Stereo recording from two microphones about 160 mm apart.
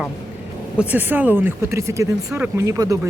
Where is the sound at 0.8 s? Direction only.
10° right (ahead or behind).